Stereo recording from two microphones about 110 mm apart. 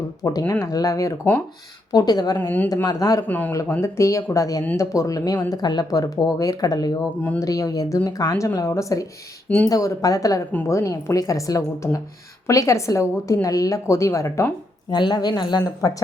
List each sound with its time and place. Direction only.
0.2 s speech: 30° left (ahead or behind)
3.2 s a man's voice: 15° left (ahead or behind)
3.5 s a woman's voice: 25° left (ahead or behind)
14.8 s speech: 40° left (ahead or behind)